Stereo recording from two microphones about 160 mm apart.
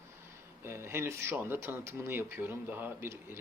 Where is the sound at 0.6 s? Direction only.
15° right (ahead or behind).